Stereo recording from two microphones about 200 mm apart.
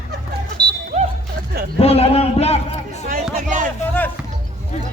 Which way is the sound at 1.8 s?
30° left (ahead or behind).